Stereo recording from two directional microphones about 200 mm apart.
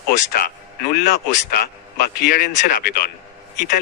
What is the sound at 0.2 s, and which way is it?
Speech, 40° left (ahead or behind).